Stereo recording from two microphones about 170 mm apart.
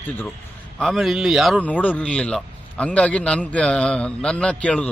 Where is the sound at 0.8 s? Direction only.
Centre (ahead or behind).